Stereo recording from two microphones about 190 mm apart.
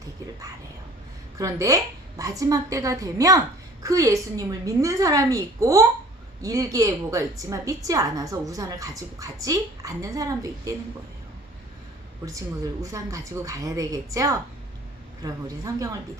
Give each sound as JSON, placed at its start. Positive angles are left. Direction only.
{"t": 1.4, "sound": "a woman's voice", "side_deg": -15}
{"t": 12.8, "sound": "a woman's voice", "side_deg": -15}